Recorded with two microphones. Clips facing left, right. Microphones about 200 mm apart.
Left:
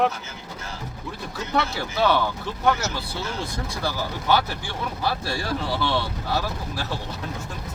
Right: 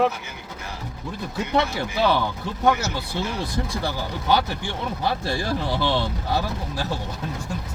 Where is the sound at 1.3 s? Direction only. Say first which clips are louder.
Right 3 dB; 15° right (ahead or behind).